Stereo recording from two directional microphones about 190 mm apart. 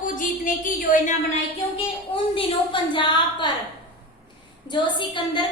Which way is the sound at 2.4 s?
25° left (ahead or behind).